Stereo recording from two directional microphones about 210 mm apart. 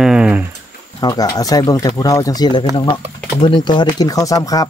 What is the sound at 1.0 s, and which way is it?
Speech, 20° left (ahead or behind).